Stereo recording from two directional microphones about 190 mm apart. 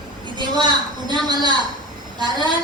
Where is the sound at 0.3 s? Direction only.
25° right (ahead or behind).